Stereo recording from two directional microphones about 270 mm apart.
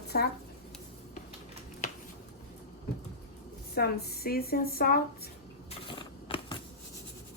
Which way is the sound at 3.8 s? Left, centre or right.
Left.